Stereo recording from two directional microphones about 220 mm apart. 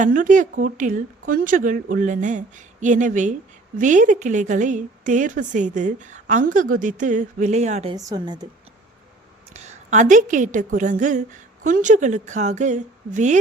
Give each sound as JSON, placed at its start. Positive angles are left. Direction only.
{"t": 0.0, "sound": "a woman's voice", "side_deg": -35}
{"t": 7.9, "sound": "a woman's voice", "side_deg": -15}
{"t": 9.5, "sound": "a woman's voice", "side_deg": -30}